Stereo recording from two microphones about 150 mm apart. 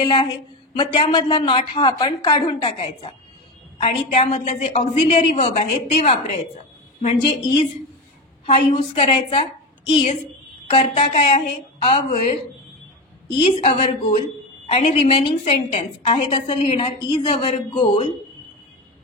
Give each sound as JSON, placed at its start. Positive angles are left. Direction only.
{"t": 0.0, "sound": "a woman's voice", "side_deg": 30}
{"t": 8.7, "sound": "a woman's voice", "side_deg": 45}
{"t": 13.4, "sound": "a woman's voice", "side_deg": 40}